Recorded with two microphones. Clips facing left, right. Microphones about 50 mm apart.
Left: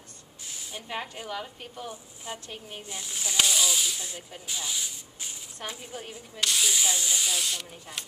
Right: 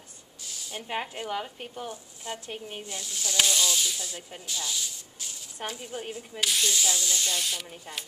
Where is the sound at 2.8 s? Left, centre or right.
Centre.